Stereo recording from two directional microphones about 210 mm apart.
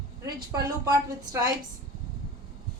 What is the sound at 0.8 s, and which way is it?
Speech, 20° right (ahead or behind).